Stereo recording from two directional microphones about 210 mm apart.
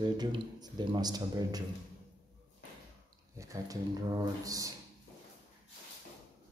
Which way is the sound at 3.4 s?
15° right (ahead or behind).